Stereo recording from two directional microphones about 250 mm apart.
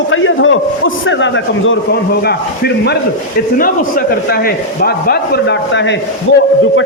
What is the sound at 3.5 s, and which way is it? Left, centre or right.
A man's voice, left.